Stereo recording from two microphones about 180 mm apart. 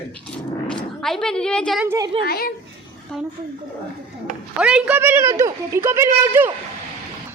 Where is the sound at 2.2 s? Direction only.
60° left (ahead or behind).